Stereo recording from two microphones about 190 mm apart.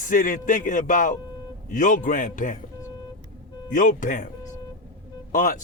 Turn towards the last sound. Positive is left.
turn(degrees=45)  # may be behind; listen again after turning